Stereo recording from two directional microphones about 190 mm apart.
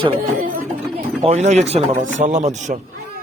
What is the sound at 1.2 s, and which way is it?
A man's voice, 35° right (ahead or behind).